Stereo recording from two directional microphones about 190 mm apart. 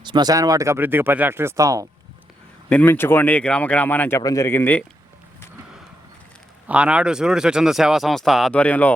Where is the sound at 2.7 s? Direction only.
10° left (ahead or behind).